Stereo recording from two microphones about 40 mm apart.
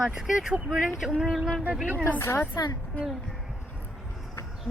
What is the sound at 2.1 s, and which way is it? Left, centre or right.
Speech, left.